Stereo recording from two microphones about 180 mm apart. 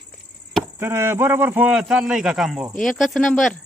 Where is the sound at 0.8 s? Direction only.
15° right (ahead or behind).